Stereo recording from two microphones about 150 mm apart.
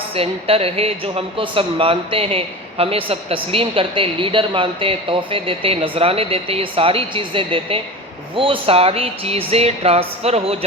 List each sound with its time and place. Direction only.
0.1 s speech: 40° right (ahead or behind)